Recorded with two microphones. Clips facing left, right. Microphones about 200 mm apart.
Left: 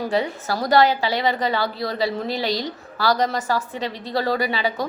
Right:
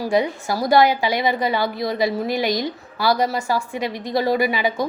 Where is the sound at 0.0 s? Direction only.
15° right (ahead or behind).